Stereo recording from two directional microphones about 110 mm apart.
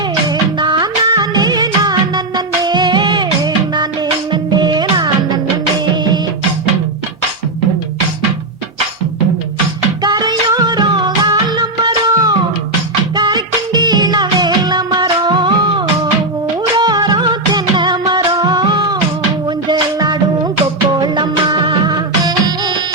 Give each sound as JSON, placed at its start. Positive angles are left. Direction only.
{"t": 0.6, "sound": "music of bollywood", "side_deg": -45}
{"t": 4.3, "sound": "music", "side_deg": -45}
{"t": 10.0, "sound": "music", "side_deg": -40}
{"t": 13.1, "sound": "music of bollywood", "side_deg": -40}
{"t": 16.7, "sound": "music", "side_deg": -40}